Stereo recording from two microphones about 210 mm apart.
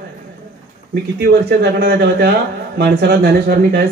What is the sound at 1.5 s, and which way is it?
Speech, 50° right (ahead or behind).